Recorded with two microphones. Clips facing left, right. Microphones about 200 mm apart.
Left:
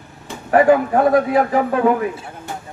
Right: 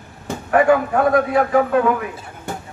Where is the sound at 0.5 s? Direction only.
35° left (ahead or behind).